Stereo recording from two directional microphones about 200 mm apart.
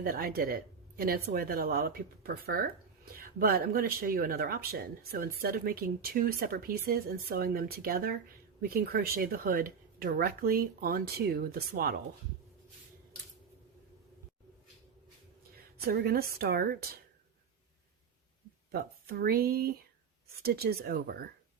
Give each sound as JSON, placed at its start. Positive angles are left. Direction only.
{"t": 0.0, "sound": "speech", "side_deg": -45}
{"t": 15.8, "sound": "speech", "side_deg": -50}
{"t": 18.7, "sound": "speech", "side_deg": -50}